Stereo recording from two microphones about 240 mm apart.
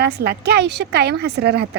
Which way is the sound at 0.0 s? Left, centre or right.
Right.